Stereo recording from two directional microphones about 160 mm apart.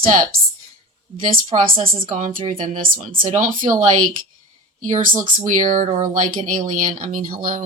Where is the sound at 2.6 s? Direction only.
60° right (ahead or behind).